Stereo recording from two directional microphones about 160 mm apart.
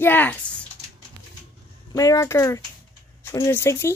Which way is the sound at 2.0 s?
20° left (ahead or behind).